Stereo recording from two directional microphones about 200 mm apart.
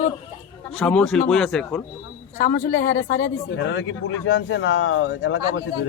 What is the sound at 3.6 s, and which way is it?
Speech, 65° left (ahead or behind).